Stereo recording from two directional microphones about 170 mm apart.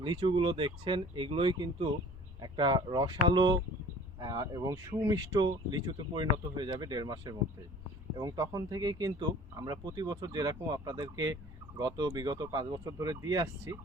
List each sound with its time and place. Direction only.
0.0 s speech: 30° right (ahead or behind)